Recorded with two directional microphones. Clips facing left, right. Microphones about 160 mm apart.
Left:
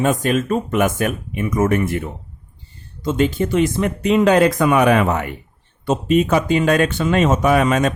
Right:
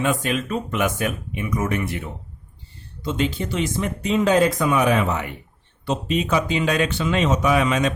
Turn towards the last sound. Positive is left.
turn(degrees=50)  # may be behind; listen again after turning